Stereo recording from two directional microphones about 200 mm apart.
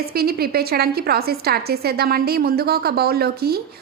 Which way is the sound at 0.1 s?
50° right (ahead or behind).